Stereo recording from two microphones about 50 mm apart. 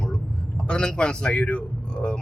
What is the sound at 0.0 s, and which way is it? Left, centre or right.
A man's voice, centre.